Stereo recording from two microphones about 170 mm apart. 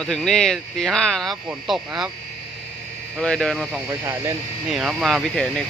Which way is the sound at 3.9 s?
15° right (ahead or behind).